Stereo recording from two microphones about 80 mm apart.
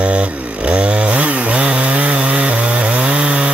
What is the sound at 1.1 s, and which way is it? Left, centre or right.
Chainsaw, centre.